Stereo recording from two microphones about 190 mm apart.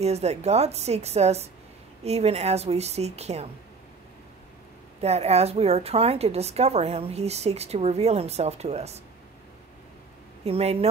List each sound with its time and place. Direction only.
0.0 s a woman's voice: 35° right (ahead or behind)
5.0 s a woman's voice: 35° right (ahead or behind)
10.4 s a woman's voice: 35° right (ahead or behind)